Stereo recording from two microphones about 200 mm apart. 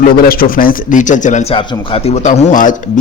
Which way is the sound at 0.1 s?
45° left (ahead or behind).